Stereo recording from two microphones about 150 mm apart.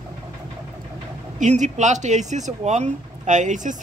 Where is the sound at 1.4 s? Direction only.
55° right (ahead or behind).